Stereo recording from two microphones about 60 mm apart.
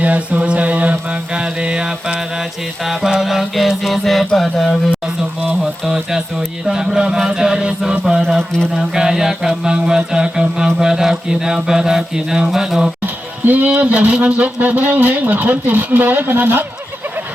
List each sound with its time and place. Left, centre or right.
0.0 s mantra: right
2.8 s music: centre
5.8 s mantra: centre
8.4 s speech: centre
8.7 s mantra: centre
13.4 s speech: right